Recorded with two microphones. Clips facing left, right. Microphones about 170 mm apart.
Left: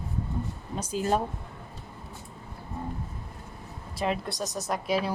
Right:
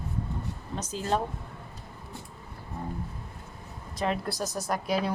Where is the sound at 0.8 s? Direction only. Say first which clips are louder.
Left 3 dB; 10° left (ahead or behind).